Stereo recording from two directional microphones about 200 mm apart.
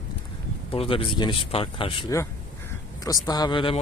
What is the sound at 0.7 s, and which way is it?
Speech, 30° left (ahead or behind).